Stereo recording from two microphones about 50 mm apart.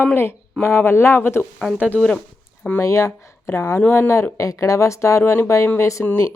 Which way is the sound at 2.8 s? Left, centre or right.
Left.